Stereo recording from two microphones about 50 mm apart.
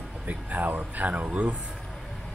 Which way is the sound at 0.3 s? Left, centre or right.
Right.